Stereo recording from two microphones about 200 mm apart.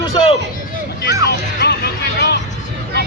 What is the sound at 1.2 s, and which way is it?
Speech, 55° left (ahead or behind).